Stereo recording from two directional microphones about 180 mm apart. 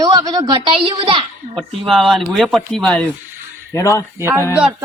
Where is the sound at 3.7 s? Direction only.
15° left (ahead or behind).